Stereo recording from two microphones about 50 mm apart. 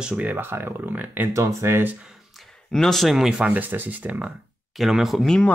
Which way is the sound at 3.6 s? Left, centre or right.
Right.